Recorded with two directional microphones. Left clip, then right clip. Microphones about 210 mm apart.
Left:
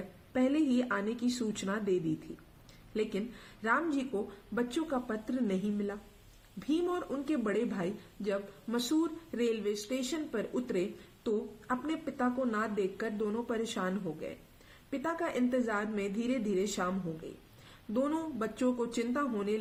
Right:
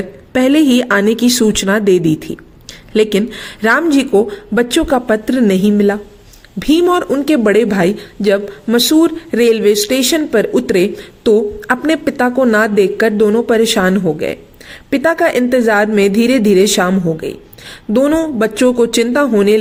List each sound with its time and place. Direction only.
0.3 s speech: 40° right (ahead or behind)